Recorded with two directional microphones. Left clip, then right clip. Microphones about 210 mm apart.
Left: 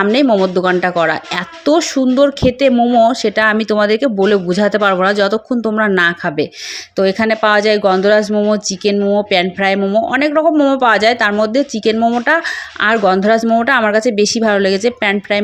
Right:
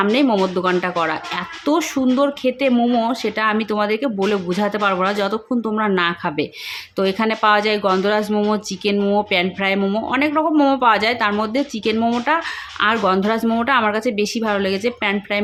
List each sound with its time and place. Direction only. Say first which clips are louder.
0.0 s speech: left 5 dB; 25° left (ahead or behind)